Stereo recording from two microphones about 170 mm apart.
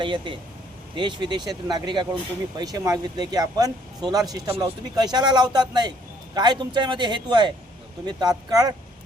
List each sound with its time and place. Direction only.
0.0 s speech: 30° right (ahead or behind)